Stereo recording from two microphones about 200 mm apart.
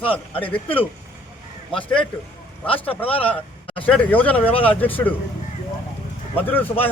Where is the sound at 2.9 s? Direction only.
10° left (ahead or behind).